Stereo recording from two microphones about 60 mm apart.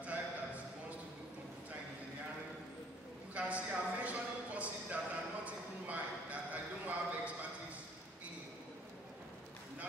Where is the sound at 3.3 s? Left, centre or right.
Right.